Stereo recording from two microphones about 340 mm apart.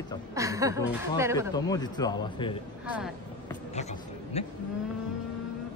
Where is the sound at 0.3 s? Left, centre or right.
Centre.